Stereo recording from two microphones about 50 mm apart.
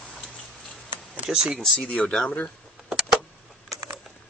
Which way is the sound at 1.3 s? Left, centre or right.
Centre.